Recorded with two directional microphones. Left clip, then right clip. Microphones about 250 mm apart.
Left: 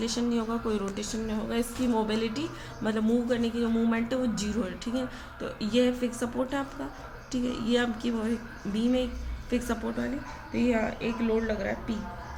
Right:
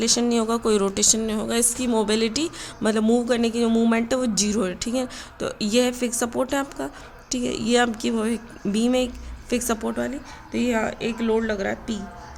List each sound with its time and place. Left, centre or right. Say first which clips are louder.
0.0 s speech: right 9 dB; right